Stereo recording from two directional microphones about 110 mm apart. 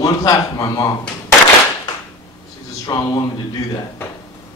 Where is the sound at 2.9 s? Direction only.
35° left (ahead or behind).